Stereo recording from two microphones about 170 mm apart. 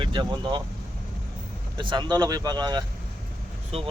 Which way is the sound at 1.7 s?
30° right (ahead or behind).